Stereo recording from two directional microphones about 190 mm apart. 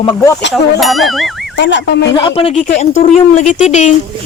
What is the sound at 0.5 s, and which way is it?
Speech, centre (ahead or behind).